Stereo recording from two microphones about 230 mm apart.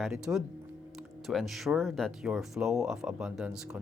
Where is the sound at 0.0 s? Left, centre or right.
Centre.